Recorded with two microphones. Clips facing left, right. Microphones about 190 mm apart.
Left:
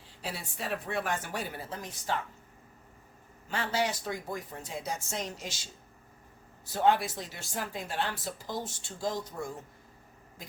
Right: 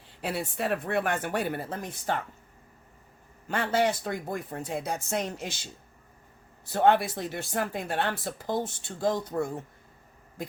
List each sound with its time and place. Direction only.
0.2 s speech: 60° right (ahead or behind)
3.5 s speech: 55° right (ahead or behind)
6.7 s speech: 60° right (ahead or behind)